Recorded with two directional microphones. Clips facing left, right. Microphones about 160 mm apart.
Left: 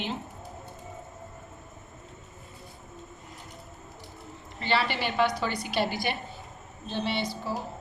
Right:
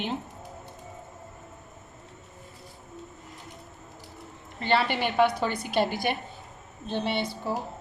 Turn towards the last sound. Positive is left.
turn(degrees=-55)  # may be behind; listen again after turning